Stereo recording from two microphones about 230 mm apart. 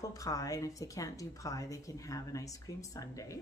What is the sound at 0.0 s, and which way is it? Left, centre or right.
A woman's voice, centre.